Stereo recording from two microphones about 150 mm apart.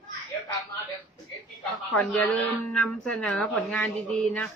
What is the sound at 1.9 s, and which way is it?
Speech, 10° left (ahead or behind).